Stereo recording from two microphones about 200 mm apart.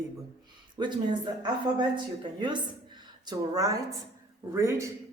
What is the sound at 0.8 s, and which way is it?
Speech, 25° right (ahead or behind).